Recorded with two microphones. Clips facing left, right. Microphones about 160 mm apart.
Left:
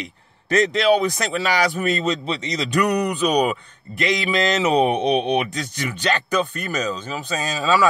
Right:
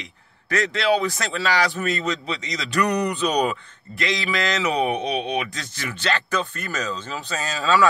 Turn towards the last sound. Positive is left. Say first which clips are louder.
# left 1 dB
turn(degrees=15)  # may be behind; listen again after turning